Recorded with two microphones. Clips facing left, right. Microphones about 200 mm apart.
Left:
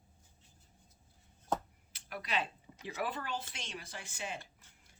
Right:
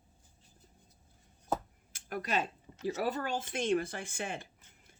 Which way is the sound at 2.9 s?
40° right (ahead or behind).